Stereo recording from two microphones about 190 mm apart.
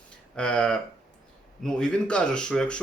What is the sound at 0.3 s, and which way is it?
Speech, 5° left (ahead or behind).